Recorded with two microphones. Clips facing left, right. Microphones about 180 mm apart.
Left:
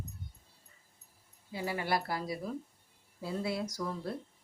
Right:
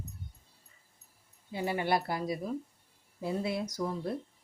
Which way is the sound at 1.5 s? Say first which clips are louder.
Right 3 dB; 25° right (ahead or behind).